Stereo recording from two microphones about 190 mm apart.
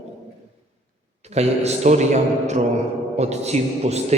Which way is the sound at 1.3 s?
35° right (ahead or behind).